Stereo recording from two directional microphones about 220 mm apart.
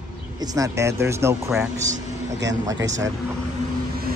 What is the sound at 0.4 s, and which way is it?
Speech, 15° right (ahead or behind).